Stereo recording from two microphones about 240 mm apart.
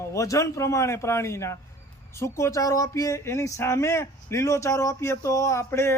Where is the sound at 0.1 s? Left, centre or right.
Centre.